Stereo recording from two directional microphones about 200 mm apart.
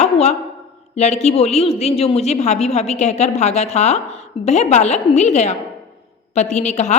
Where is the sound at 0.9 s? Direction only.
35° left (ahead or behind).